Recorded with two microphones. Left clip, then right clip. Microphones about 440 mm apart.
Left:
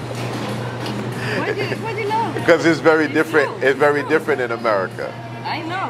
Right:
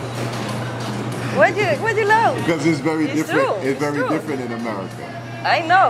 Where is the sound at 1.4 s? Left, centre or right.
Right.